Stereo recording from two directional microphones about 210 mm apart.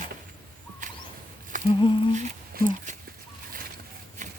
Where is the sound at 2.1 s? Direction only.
40° right (ahead or behind).